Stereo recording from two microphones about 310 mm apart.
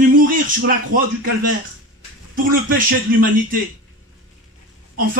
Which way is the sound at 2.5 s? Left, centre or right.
Right.